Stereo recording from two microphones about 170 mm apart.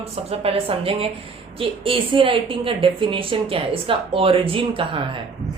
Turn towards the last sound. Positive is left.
turn(degrees=-30)  # may be behind; listen again after turning